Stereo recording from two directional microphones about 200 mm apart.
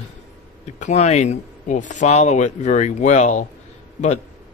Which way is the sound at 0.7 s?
35° left (ahead or behind).